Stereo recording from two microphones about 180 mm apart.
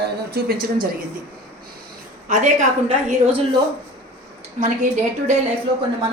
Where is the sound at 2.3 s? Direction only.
40° right (ahead or behind).